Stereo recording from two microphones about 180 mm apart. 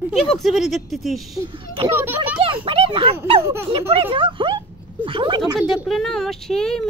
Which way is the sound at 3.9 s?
30° right (ahead or behind).